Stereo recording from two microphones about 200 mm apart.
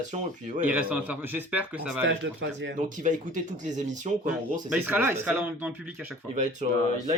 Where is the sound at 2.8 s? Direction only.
40° right (ahead or behind).